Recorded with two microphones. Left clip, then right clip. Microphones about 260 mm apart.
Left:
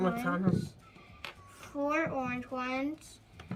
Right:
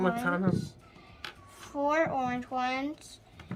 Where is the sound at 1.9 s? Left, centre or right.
Right.